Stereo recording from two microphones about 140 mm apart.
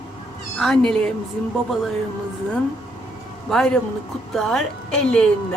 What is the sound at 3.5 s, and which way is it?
A woman's voice, 5° left (ahead or behind).